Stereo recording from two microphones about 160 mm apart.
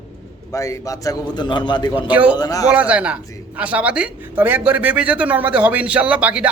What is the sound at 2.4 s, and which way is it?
Speech, 20° left (ahead or behind).